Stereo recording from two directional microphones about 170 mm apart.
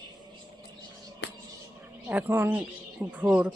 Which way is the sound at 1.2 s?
90° left.